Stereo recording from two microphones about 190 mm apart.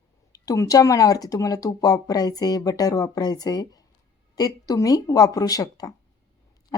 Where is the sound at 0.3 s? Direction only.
15° left (ahead or behind).